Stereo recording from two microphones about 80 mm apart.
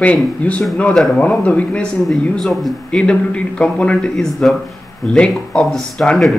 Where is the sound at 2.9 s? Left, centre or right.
Centre.